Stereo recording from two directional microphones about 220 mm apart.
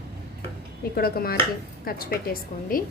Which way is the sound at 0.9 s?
45° left (ahead or behind).